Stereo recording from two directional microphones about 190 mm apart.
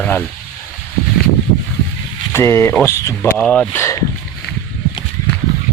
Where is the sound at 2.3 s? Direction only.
15° left (ahead or behind).